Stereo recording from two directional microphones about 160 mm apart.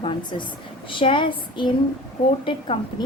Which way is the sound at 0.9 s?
30° left (ahead or behind).